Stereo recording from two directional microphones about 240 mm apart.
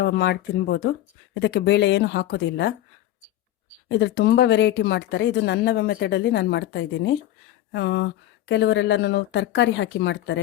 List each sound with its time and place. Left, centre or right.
0.0 s speech: left
3.8 s speech: left